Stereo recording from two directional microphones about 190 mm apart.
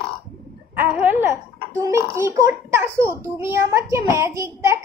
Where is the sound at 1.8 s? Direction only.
15° right (ahead or behind).